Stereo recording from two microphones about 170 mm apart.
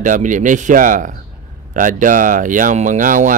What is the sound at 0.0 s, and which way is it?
Speech, 50° right (ahead or behind).